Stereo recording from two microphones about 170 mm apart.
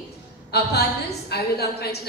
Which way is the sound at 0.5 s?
70° left (ahead or behind).